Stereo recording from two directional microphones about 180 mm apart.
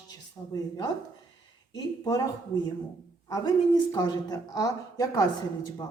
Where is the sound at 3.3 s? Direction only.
20° left (ahead or behind).